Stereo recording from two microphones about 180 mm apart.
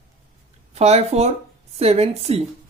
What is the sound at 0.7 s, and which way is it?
Speech, 35° right (ahead or behind).